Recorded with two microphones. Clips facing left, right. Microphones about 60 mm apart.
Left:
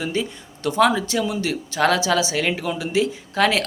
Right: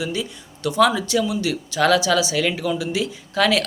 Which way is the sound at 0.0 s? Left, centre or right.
Left.